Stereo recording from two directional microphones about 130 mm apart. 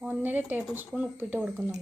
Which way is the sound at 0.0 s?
15° right (ahead or behind).